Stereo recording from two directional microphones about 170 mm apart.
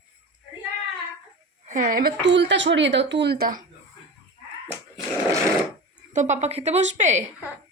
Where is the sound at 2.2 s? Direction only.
90° right; by 3.6 s 60° right (ahead or behind).